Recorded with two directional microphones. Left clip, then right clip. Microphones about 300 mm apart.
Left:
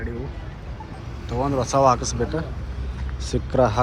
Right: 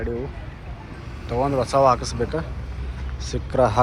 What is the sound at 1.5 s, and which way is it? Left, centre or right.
Speech, centre.